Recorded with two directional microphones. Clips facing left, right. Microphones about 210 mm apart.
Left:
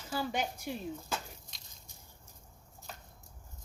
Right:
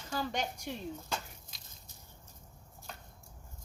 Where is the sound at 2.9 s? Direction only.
Centre (ahead or behind).